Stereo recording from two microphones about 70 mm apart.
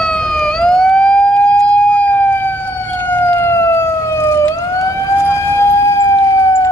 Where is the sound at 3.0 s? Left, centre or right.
Left.